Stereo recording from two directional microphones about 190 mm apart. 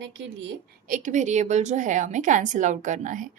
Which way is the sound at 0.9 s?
40° right (ahead or behind).